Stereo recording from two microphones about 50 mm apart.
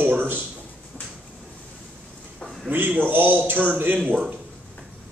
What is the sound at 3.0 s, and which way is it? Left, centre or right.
Speech, right.